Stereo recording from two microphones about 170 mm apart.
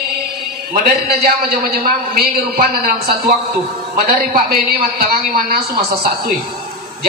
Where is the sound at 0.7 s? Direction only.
65° right (ahead or behind).